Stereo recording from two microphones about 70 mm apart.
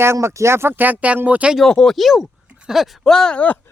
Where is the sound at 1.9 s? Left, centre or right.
Centre.